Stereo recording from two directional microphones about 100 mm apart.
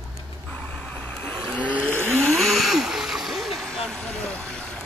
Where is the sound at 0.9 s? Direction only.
15° left (ahead or behind).